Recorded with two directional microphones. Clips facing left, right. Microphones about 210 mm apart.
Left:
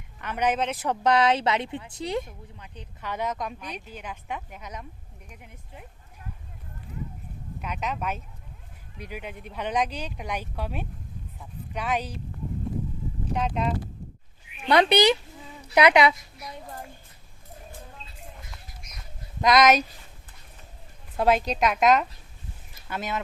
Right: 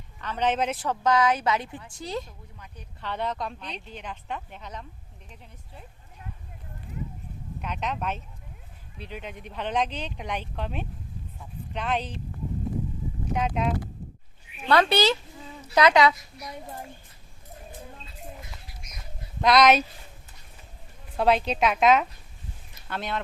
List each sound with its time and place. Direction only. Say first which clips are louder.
0.2 s a man's voice: even; 15° left (ahead or behind)
0.5 s a woman's voice: right 1 dB; centre (ahead or behind)
0.8 s speech: left 1 dB; 20° left (ahead or behind)
7.6 s speech: even; 5° left (ahead or behind)
11.3 s a sound: even; 10° left (ahead or behind)
13.3 s a woman's voice: right 1 dB; 5° right (ahead or behind)
14.7 s speech: left 2 dB; 15° left (ahead or behind)
19.4 s a woman's voice: even; centre (ahead or behind)
21.2 s a woman's voice: even; centre (ahead or behind)